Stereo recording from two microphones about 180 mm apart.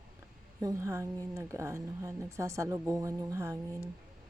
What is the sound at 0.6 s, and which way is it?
A woman's voice, 15° right (ahead or behind).